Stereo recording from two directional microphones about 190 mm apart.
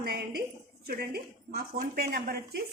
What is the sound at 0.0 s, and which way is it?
A woman's voice, 55° right (ahead or behind).